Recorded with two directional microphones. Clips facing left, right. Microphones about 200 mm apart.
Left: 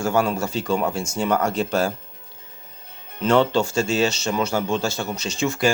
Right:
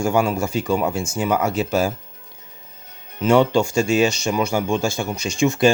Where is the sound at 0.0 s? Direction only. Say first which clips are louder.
Right 2 dB; 10° right (ahead or behind).